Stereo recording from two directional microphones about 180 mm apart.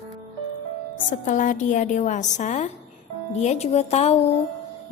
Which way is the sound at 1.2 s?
45° left (ahead or behind).